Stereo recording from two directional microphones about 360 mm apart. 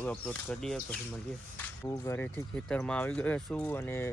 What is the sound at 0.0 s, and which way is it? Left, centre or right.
Speech, centre.